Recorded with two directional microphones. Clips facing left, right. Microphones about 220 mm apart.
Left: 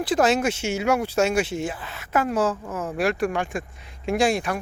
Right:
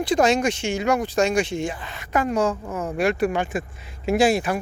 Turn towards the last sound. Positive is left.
turn(degrees=-5)  # may be behind; listen again after turning